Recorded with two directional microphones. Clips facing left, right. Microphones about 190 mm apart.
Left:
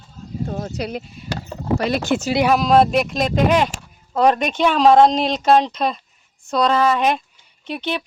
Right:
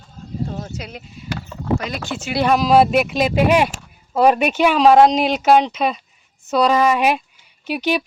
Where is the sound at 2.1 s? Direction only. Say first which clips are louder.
Left 8 dB; 60° left (ahead or behind).